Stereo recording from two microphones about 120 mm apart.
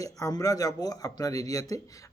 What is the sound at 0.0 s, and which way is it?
Speech, 30° left (ahead or behind).